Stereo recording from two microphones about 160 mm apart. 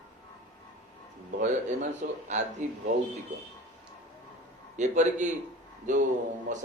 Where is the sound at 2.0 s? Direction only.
55° right (ahead or behind).